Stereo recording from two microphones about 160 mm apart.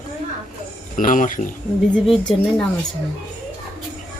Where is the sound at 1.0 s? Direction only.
55° left (ahead or behind).